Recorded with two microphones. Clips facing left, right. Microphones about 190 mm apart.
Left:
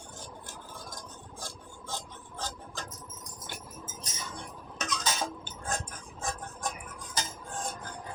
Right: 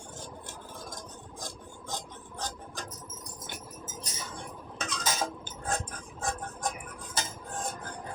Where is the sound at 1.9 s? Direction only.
15° right (ahead or behind).